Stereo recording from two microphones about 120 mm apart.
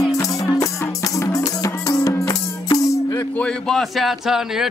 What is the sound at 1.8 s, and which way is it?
Music, 30° left (ahead or behind).